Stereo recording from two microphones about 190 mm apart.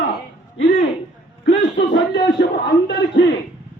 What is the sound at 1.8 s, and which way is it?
A man's voice, 70° left (ahead or behind).